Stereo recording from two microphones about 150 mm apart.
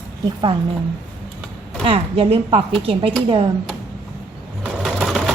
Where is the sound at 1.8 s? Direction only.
40° right (ahead or behind).